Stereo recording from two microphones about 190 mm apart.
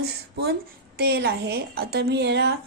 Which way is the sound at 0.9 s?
55° right (ahead or behind).